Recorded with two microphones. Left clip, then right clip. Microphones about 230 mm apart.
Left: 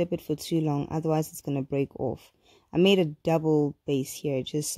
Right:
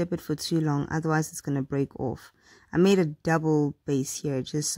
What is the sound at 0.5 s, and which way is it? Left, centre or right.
Speech, right.